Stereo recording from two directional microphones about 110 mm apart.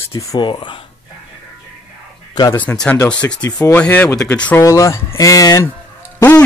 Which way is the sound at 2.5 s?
15° left (ahead or behind).